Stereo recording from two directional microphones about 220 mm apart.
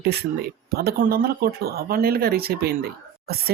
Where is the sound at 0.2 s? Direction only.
45° right (ahead or behind).